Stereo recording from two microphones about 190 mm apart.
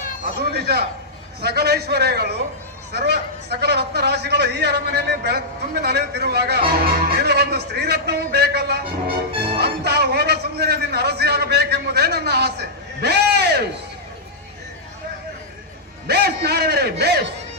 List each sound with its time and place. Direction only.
0.4 s a man's voice: 55° right (ahead or behind)
16.0 s a man's voice: 60° right (ahead or behind)